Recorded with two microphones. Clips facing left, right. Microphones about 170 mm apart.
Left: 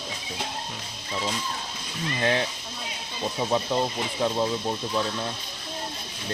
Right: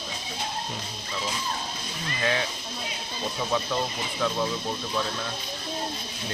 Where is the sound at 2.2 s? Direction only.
30° left (ahead or behind).